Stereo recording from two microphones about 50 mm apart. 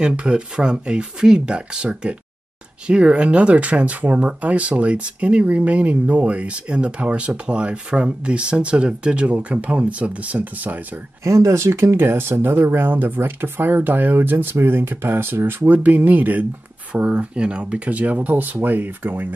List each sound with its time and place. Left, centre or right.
0.0 s speech: right
11.2 s speech: right
16.9 s speech: right